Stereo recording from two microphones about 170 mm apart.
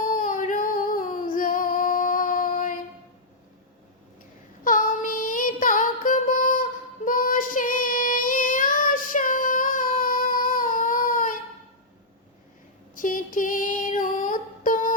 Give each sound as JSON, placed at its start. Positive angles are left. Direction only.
{"t": 0.1, "sound": "female singing", "side_deg": 55}
{"t": 4.6, "sound": "music", "side_deg": 55}
{"t": 13.0, "sound": "music", "side_deg": 55}